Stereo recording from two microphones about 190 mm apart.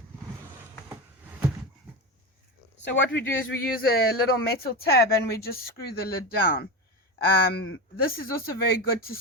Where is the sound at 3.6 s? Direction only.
50° left (ahead or behind).